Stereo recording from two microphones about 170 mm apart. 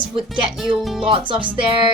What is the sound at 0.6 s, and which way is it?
Speech, centre (ahead or behind).